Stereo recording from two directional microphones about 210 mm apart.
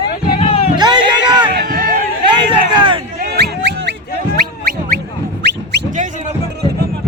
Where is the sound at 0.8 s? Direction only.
20° right (ahead or behind).